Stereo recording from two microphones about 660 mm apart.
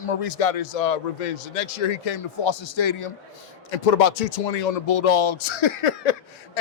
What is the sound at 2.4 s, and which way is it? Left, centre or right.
Speech, left.